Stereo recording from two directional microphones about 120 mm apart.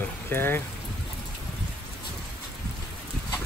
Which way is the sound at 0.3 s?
20° left (ahead or behind).